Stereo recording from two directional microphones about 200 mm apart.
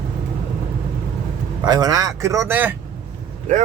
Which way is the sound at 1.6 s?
20° right (ahead or behind).